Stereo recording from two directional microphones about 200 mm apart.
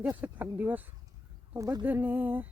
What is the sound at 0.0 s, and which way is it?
Speech, 10° right (ahead or behind).